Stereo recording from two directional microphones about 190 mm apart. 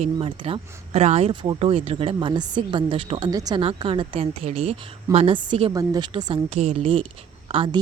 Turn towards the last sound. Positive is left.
turn(degrees=-30)  # may be behind; listen again after turning